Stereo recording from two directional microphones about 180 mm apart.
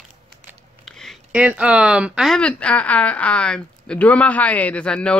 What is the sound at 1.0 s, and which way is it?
Speech, 5° right (ahead or behind).